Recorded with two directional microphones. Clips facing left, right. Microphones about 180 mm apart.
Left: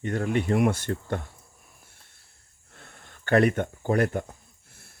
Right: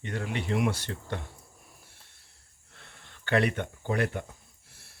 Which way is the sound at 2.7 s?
50° left (ahead or behind).